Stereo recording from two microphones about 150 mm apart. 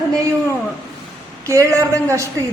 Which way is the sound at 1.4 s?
20° right (ahead or behind).